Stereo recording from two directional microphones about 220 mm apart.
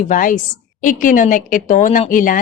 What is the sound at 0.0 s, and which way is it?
A woman's voice, 35° left (ahead or behind).